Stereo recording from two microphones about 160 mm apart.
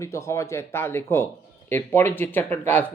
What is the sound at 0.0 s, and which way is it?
Speech, 20° left (ahead or behind).